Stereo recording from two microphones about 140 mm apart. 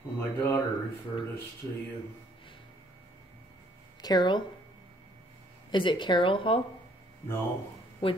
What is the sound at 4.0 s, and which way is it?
Speech, 30° left (ahead or behind).